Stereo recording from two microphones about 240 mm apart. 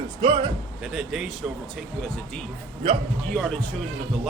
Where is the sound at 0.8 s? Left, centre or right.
Centre.